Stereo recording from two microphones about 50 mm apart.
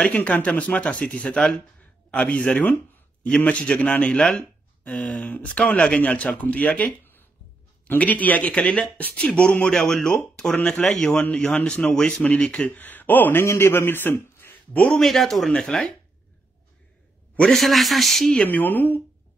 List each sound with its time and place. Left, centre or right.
0.1 s speech: left
9.8 s speech: centre
12.2 s speech: left
13.4 s a man's voice: left
14.4 s a sound: left
14.9 s speech: centre
17.6 s speech: centre
18.4 s speech: left